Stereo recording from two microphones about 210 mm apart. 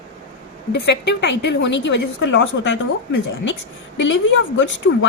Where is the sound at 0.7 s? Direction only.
55° left (ahead or behind).